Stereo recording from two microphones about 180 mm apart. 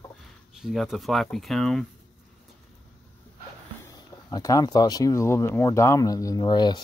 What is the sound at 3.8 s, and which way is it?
Speech, 20° left (ahead or behind).